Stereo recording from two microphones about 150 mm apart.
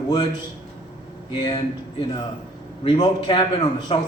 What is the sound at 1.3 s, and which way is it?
A man's voice, 30° left (ahead or behind).